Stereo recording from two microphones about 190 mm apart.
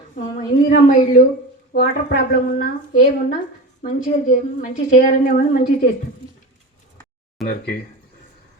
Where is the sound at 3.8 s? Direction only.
45° left (ahead or behind).